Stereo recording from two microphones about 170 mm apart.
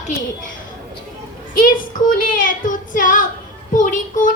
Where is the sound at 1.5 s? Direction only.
55° left (ahead or behind).